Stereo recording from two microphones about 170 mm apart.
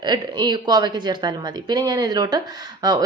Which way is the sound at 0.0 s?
25° right (ahead or behind).